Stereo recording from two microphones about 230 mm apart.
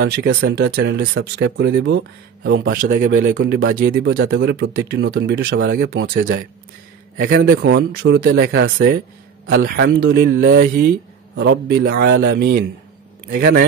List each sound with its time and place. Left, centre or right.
0.0 s a man's voice: right
4.1 s a man's voice: right